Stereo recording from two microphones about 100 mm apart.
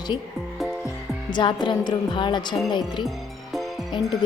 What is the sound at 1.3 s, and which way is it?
A woman's voice, 50° left (ahead or behind).